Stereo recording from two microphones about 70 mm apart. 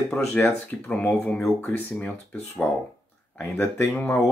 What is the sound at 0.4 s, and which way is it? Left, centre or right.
Speech, centre.